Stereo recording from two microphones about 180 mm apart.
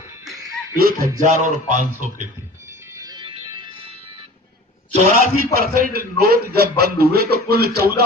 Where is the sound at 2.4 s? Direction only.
15° right (ahead or behind); by 4.2 s 30° right (ahead or behind).